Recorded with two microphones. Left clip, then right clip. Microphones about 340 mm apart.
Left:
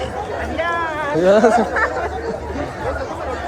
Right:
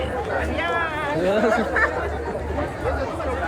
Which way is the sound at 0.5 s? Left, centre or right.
Left.